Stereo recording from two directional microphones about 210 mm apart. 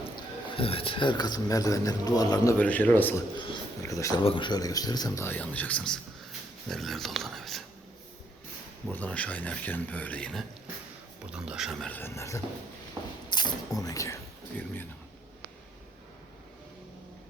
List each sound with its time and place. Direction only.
0.2 s a man's voice: 25° left (ahead or behind); by 3.2 s 10° left (ahead or behind)
3.3 s a man's voice: 20° left (ahead or behind); by 7.6 s centre (ahead or behind)
8.9 s a man's voice: 5° left (ahead or behind)
13.0 s a sound: 10° right (ahead or behind)
13.3 s a man's voice: 15° left (ahead or behind)